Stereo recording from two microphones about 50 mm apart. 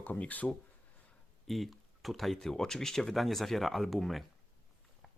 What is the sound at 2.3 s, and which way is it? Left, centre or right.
Speech, centre.